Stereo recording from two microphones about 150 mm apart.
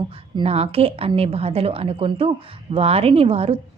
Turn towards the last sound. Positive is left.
turn(degrees=-40)  # may be behind; listen again after turning